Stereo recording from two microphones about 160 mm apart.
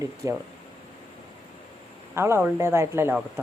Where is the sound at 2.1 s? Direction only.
15° right (ahead or behind).